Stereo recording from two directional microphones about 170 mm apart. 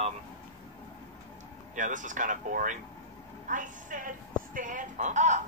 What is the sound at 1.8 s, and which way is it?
Speech, 50° right (ahead or behind).